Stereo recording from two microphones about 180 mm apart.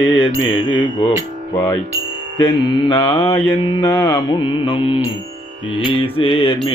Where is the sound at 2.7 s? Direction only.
25° left (ahead or behind).